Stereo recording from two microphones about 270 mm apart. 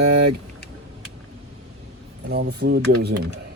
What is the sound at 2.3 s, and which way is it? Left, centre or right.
Speech, right.